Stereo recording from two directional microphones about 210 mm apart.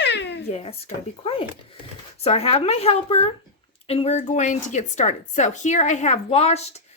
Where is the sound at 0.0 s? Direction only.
55° left (ahead or behind).